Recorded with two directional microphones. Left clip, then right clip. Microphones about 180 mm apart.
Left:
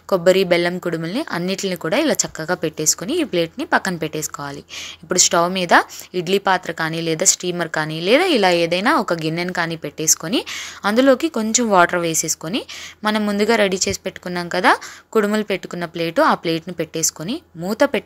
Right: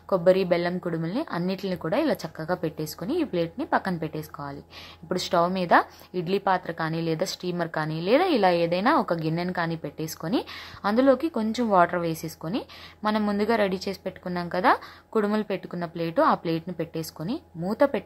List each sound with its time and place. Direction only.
0.1 s speech: 25° left (ahead or behind)